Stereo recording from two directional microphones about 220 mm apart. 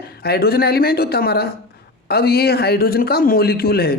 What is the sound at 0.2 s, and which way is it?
A man's voice, 45° left (ahead or behind).